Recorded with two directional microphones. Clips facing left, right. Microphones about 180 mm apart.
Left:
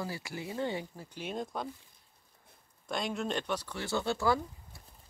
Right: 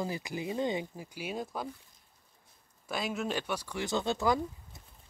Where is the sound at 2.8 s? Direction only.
5° right (ahead or behind).